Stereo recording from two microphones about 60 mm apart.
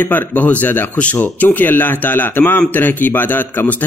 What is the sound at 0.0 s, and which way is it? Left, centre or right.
A man's voice, left.